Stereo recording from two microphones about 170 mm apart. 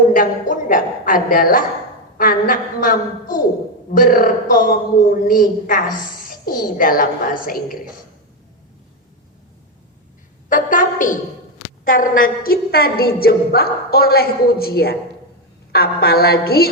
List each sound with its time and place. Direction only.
0.1 s a woman's voice: 55° left (ahead or behind)
10.5 s a woman's voice: 50° left (ahead or behind)